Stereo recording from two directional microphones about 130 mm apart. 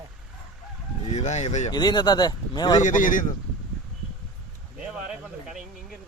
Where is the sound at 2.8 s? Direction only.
90° left.